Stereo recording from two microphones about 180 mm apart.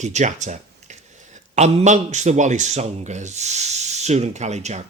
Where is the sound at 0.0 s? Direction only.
40° right (ahead or behind).